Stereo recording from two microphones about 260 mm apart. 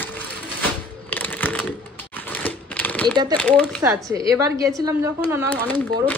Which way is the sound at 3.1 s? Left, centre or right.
Centre.